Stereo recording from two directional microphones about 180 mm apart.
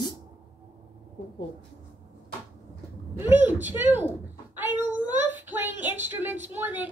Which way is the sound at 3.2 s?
10° right (ahead or behind).